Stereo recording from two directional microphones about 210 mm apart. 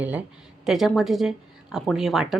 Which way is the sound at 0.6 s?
Centre (ahead or behind).